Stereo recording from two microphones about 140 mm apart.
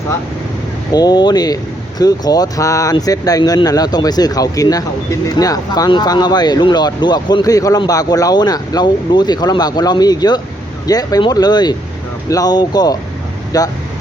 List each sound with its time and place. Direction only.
0.9 s speech: 30° left (ahead or behind)